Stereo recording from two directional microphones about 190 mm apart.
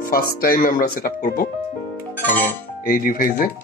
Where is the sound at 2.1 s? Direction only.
10° left (ahead or behind).